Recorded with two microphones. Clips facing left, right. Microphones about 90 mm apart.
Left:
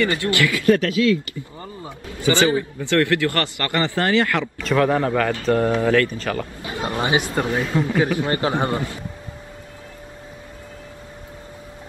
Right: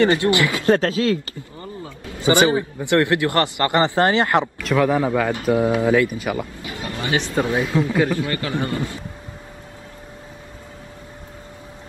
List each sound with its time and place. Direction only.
0.0 s a man's voice: 25° right (ahead or behind)
2.0 s a man's voice: 20° right (ahead or behind)
4.6 s speech: centre (ahead or behind)
6.6 s a sound: 25° left (ahead or behind)
7.4 s speech: 5° right (ahead or behind)
8.2 s a man's voice: 25° left (ahead or behind)